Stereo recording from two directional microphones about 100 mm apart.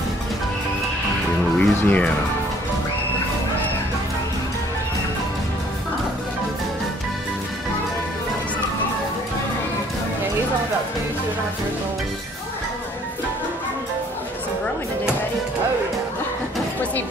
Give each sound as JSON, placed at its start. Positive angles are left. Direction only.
{"t": 1.6, "sound": "music", "side_deg": 15}